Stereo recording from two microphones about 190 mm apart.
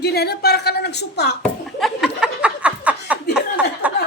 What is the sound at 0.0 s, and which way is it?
A woman's voice, 55° left (ahead or behind).